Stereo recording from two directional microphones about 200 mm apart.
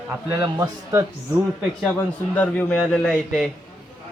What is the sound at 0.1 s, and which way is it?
Speech, 15° right (ahead or behind).